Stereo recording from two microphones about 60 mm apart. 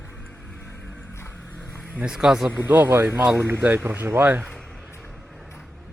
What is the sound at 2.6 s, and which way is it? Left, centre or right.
Speech, right.